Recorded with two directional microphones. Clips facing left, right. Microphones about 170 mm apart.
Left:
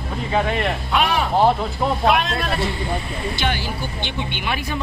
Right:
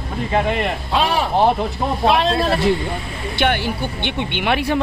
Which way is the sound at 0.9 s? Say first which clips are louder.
Right 1 dB; 30° right (ahead or behind).